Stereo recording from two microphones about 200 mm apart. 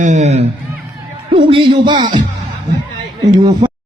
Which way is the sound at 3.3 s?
20° right (ahead or behind).